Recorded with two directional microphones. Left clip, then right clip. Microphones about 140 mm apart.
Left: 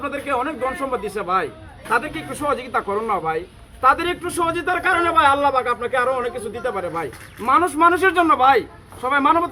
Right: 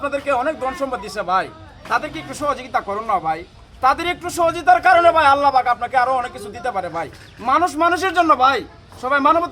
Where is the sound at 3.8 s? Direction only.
50° right (ahead or behind).